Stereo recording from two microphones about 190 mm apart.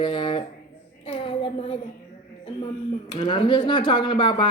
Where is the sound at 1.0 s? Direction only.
30° left (ahead or behind).